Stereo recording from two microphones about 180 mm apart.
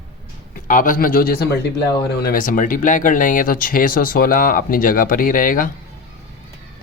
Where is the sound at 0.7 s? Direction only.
50° left (ahead or behind).